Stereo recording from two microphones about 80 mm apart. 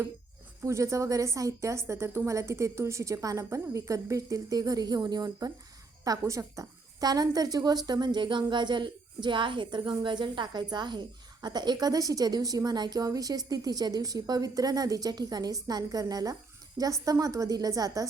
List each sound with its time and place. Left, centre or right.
0.6 s a woman's voice: right
6.1 s a woman's voice: right
7.0 s a woman's voice: right